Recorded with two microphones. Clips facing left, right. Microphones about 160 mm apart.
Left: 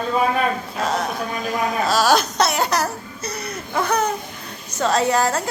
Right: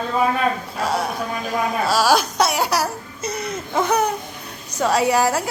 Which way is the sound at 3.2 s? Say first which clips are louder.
Right 4 dB; 25° right (ahead or behind).